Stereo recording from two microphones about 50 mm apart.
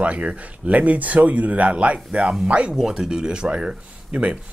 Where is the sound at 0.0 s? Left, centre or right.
Right.